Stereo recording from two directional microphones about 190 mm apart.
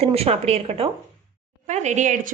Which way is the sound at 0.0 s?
30° right (ahead or behind).